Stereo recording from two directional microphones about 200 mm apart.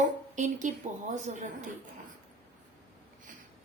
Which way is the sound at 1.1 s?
35° right (ahead or behind).